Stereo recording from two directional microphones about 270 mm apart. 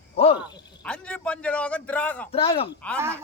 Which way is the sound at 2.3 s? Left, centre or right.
Centre.